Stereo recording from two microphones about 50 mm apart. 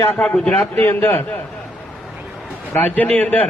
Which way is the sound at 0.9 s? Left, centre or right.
Left.